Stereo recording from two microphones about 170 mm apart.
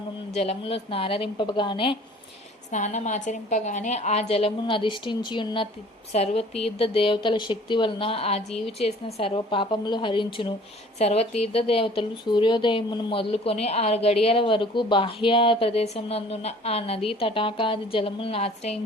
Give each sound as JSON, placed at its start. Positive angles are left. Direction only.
{"t": 0.3, "sound": "a woman's voice", "side_deg": 35}
{"t": 2.7, "sound": "a woman's voice", "side_deg": 45}